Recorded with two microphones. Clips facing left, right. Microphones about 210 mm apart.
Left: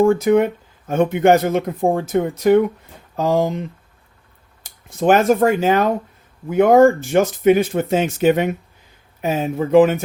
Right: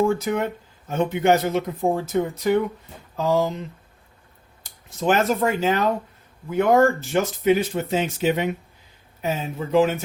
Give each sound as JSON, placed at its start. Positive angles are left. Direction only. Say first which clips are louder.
{"t": 0.0, "sound": "speech", "louder": "left 7 dB", "side_deg": 55}
{"t": 4.6, "sound": "speech", "louder": "left 6 dB", "side_deg": 50}